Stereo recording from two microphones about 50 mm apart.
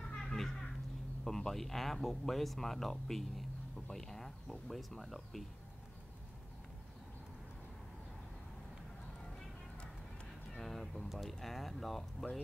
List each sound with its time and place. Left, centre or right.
0.1 s a sound: centre
1.2 s speech: centre
10.6 s speech: centre